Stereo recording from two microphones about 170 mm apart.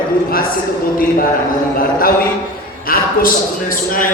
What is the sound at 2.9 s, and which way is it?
Speech, 60° left (ahead or behind).